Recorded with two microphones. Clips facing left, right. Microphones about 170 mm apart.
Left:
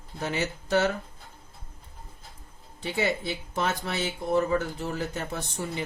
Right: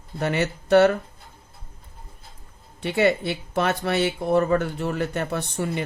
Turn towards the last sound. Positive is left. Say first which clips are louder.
# right 6 dB
turn(degrees=-65)  # may be behind; listen again after turning